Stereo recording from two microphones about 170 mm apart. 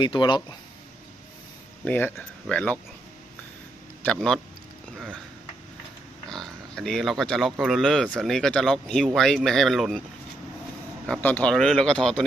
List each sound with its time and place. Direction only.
0.0 s speech: 25° left (ahead or behind)
1.8 s speech: 10° left (ahead or behind)
4.0 s speech: 5° left (ahead or behind)
6.2 s oink: 5° left (ahead or behind)
7.6 s speech: centre (ahead or behind)
11.0 s speech: 5° left (ahead or behind)